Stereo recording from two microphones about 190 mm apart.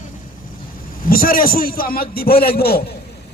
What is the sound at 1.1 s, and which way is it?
A man's voice, 50° left (ahead or behind).